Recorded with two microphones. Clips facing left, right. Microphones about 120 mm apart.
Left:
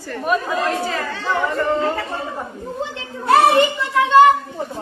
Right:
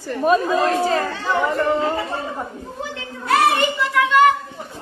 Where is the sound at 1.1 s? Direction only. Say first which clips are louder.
Right 1 dB; 20° right (ahead or behind).